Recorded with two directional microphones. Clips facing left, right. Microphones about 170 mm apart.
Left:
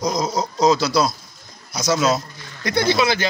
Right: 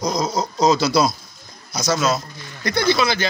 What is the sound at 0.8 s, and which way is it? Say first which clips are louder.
Speech: right 1 dB; 10° right (ahead or behind).